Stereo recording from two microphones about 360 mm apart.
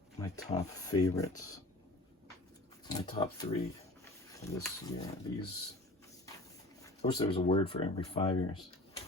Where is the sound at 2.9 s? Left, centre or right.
Centre.